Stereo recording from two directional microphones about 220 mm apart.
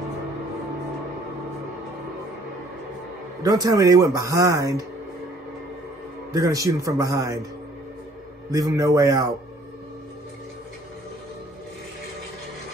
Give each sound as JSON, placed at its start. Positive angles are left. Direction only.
{"t": 3.4, "sound": "a man's voice", "side_deg": -15}
{"t": 6.3, "sound": "a man's voice", "side_deg": -15}
{"t": 8.5, "sound": "a man's voice", "side_deg": -15}